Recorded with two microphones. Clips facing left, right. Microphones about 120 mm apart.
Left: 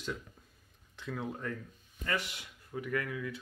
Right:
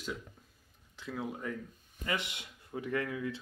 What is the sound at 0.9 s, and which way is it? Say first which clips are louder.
Speech: even; 5° right (ahead or behind).